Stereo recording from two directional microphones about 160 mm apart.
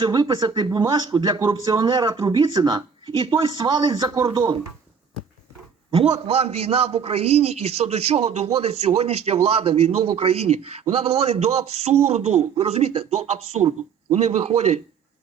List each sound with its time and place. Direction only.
0.0 s speech: 25° right (ahead or behind)
5.9 s a man's voice: 35° right (ahead or behind)